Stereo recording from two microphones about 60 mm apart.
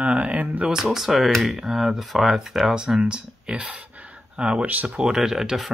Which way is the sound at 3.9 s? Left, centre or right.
Right.